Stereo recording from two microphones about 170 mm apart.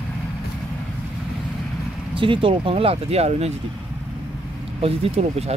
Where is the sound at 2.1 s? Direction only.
30° right (ahead or behind).